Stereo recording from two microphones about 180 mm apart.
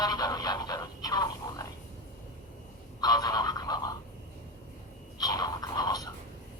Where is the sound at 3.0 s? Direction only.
20° left (ahead or behind).